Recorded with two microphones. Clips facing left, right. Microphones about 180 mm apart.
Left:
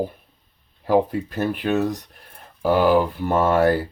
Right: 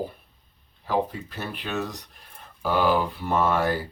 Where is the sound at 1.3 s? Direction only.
50° left (ahead or behind).